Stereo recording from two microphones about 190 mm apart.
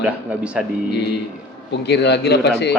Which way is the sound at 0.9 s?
60° left (ahead or behind).